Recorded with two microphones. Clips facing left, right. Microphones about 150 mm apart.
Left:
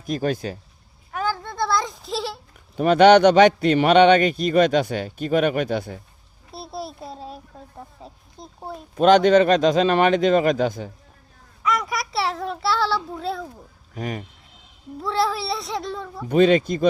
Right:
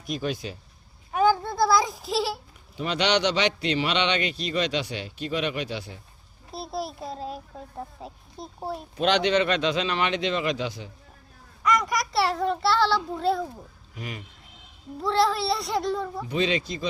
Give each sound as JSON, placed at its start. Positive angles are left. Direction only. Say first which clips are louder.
{"t": 0.0, "sound": "a man's voice", "louder": "left 6 dB", "side_deg": 45}
{"t": 1.1, "sound": "a sound", "louder": "right 5 dB", "side_deg": -15}
{"t": 2.7, "sound": "a man's voice", "louder": "left 12 dB", "side_deg": 50}
{"t": 6.5, "sound": "a sound", "louder": "right 1 dB", "side_deg": 0}
{"t": 8.0, "sound": "speech", "louder": "right 2 dB", "side_deg": -5}
{"t": 9.0, "sound": "a man's voice", "louder": "left 8 dB", "side_deg": 45}
{"t": 11.6, "sound": "child singing", "louder": "even", "side_deg": 5}
{"t": 13.9, "sound": "a man's voice", "louder": "left 8 dB", "side_deg": 45}
{"t": 15.0, "sound": "a child's voice", "louder": "even", "side_deg": 0}
{"t": 16.3, "sound": "a man's voice", "louder": "left 11 dB", "side_deg": 50}